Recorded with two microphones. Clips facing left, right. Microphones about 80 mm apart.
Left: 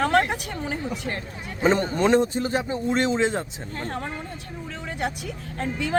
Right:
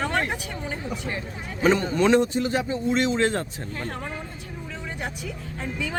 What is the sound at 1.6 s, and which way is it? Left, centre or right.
Speech, left.